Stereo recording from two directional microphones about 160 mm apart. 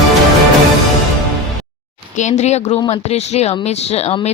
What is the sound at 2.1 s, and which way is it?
Speech, 45° left (ahead or behind).